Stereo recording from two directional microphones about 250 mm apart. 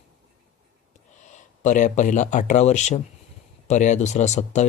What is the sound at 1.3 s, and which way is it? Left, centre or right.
Speech, left.